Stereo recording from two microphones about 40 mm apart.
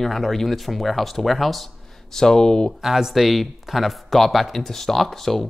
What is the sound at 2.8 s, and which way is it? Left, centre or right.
Speech, centre.